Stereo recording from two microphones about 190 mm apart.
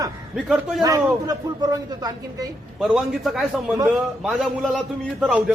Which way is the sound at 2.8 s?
Centre (ahead or behind).